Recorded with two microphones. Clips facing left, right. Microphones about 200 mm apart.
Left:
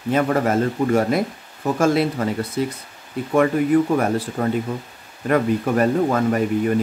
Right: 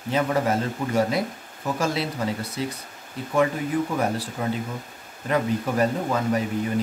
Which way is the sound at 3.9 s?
55° left (ahead or behind).